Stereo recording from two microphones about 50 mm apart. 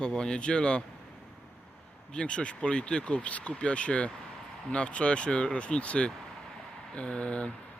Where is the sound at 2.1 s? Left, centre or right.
Left.